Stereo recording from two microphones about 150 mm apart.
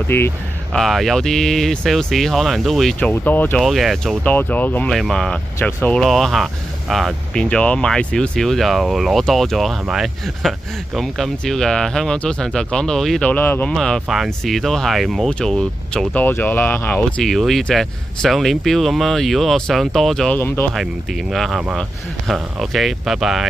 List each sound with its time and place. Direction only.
0.1 s speech: 15° left (ahead or behind)
0.7 s speech: centre (ahead or behind)
3.0 s speech: 10° left (ahead or behind)
3.6 s speech: centre (ahead or behind)
5.6 s speech: 15° left (ahead or behind)
5.9 s speech: centre (ahead or behind)
17.3 s speech: centre (ahead or behind)
20.7 s speech: centre (ahead or behind)